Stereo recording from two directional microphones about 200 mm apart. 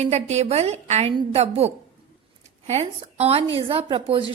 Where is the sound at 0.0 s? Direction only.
35° right (ahead or behind).